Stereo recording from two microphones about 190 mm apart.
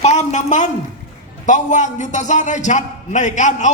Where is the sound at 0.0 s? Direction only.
35° left (ahead or behind).